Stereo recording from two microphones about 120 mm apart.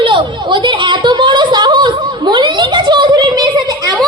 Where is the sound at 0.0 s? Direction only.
45° right (ahead or behind).